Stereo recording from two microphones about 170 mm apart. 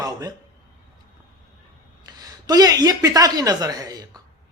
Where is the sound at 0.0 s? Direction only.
20° right (ahead or behind).